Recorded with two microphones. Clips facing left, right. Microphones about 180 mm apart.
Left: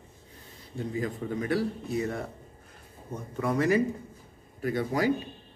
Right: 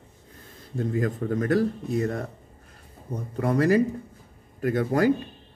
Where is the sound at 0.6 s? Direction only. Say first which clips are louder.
Right 5 dB; 50° right (ahead or behind).